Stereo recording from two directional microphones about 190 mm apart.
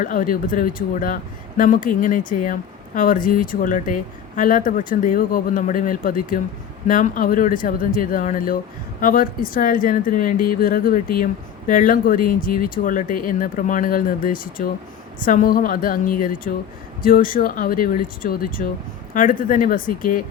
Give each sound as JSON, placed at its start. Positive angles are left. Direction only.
{"t": 0.0, "sound": "speech", "side_deg": 45}